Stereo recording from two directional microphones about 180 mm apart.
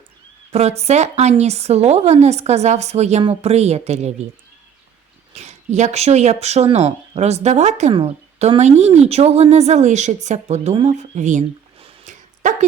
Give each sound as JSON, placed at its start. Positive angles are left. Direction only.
{"t": 0.5, "sound": "a woman's voice", "side_deg": -35}
{"t": 5.3, "sound": "speech", "side_deg": -35}